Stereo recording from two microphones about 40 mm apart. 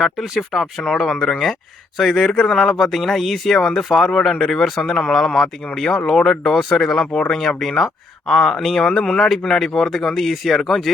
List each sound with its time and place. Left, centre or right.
0.0 s speech: centre
2.1 s speech: centre
2.5 s speech: centre
4.4 s speech: left
4.6 s speech: centre
6.4 s speech: centre